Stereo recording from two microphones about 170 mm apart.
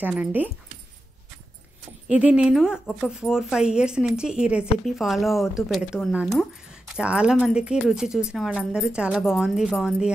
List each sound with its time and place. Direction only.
0.0 s speech: 10° right (ahead or behind)
2.0 s speech: 5° right (ahead or behind)